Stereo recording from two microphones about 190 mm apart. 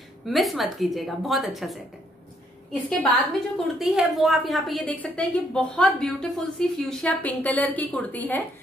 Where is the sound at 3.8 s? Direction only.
Centre (ahead or behind).